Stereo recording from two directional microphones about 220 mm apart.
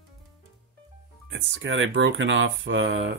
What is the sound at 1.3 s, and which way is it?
Speech, 55° right (ahead or behind).